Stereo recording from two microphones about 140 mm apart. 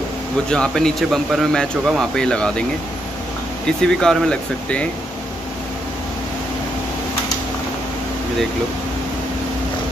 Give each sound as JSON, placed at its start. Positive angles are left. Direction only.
{"t": 0.5, "sound": "a man's voice", "side_deg": 5}
{"t": 3.6, "sound": "a man's voice", "side_deg": 5}